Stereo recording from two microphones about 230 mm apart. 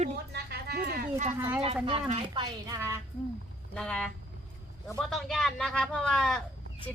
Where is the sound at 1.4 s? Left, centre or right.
Centre.